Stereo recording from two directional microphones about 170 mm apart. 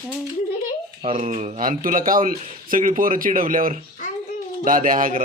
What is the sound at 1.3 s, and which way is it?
Speech, 45° right (ahead or behind).